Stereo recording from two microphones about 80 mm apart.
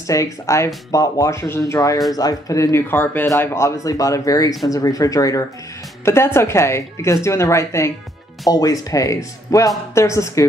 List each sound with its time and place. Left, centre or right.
0.0 s speech: left
2.1 s speech: left
2.9 s speech: left
3.3 s speech: left
6.0 s a woman's voice: left
8.5 s a woman's voice: left